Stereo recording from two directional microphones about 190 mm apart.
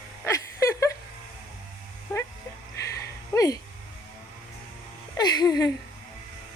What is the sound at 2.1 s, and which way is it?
Dog, 15° left (ahead or behind).